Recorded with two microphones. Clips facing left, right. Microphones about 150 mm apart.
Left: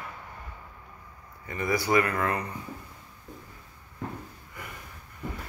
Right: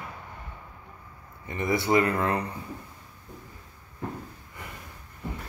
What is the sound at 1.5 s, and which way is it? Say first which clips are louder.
Speech: right 1 dB; 25° right (ahead or behind).